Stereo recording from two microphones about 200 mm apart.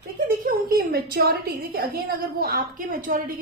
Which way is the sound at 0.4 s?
45° right (ahead or behind).